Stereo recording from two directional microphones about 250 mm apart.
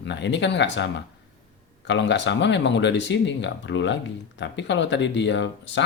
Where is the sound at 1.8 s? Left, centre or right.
Left.